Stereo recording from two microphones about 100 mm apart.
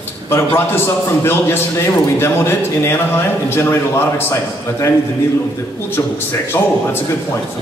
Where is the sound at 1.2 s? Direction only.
25° left (ahead or behind).